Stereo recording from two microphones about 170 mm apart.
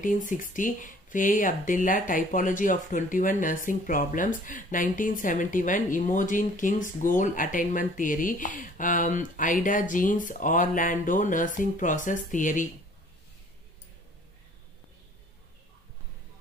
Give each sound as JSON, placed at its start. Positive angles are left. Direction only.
{"t": 0.0, "sound": "speech", "side_deg": 50}